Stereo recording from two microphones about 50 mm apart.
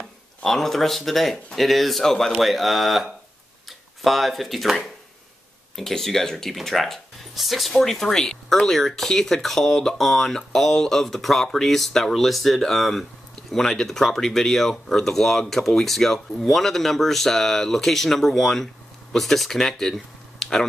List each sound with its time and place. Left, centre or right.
0.4 s speech: centre
5.8 s speech: centre